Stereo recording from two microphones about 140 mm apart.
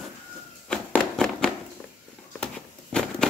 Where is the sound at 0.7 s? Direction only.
5° left (ahead or behind).